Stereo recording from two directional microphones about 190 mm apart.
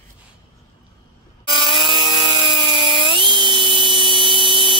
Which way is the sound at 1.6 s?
25° right (ahead or behind).